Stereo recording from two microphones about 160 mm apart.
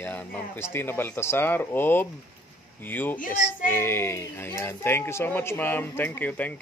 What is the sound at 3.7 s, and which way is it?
Speech, 15° left (ahead or behind).